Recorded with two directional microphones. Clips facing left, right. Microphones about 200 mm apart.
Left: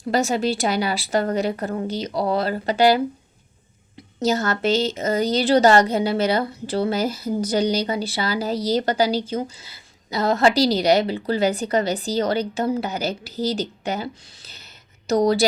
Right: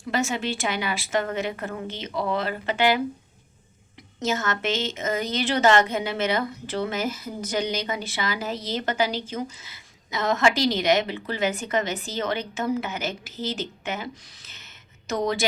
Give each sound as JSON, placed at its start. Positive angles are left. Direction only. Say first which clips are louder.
{"t": 0.1, "sound": "a woman's voice", "louder": "left 6 dB", "side_deg": 35}
{"t": 4.2, "sound": "a woman's voice", "louder": "left 5 dB", "side_deg": 35}